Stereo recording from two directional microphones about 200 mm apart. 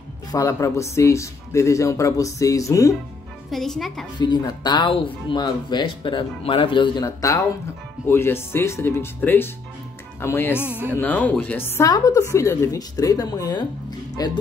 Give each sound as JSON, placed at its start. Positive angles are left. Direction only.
{"t": 0.3, "sound": "a woman's voice", "side_deg": 15}
{"t": 3.4, "sound": "a woman's voice", "side_deg": 0}
{"t": 4.2, "sound": "a woman's voice", "side_deg": 20}
{"t": 10.6, "sound": "speech", "side_deg": -10}
{"t": 11.0, "sound": "a woman's voice", "side_deg": 10}